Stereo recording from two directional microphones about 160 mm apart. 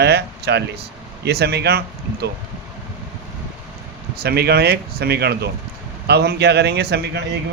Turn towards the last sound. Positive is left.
turn(degrees=-90)